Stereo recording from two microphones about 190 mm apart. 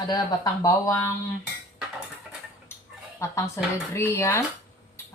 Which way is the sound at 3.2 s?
15° left (ahead or behind).